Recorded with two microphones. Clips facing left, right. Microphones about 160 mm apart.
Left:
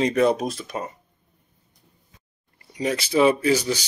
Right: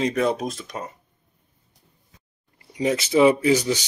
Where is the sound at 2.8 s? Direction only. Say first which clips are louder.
Right 2 dB; 20° right (ahead or behind).